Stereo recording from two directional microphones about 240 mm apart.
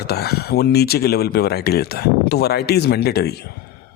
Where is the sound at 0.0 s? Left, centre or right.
Left.